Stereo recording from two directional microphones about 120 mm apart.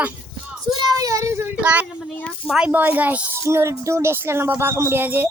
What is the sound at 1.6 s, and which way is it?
A woman's voice, 10° right (ahead or behind).